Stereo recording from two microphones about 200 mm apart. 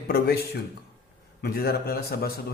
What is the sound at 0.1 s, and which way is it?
A man's voice, 50° left (ahead or behind).